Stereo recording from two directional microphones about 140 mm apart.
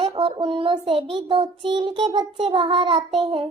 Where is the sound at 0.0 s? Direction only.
35° right (ahead or behind).